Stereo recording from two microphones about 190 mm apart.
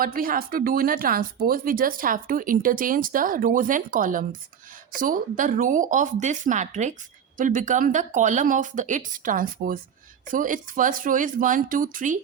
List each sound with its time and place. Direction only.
0.0 s speech: 50° right (ahead or behind)